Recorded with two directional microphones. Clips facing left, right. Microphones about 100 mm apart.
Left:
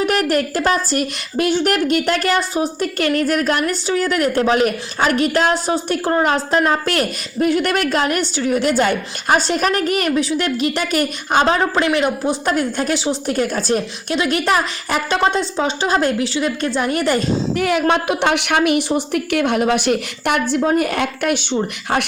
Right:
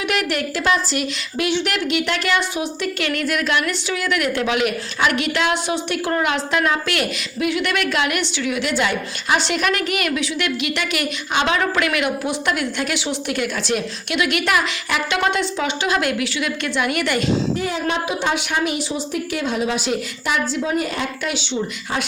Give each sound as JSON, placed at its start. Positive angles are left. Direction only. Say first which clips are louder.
{"t": 0.0, "sound": "a woman's voice", "louder": "left 5 dB", "side_deg": 40}
{"t": 17.6, "sound": "a woman's voice", "louder": "left 6 dB", "side_deg": 70}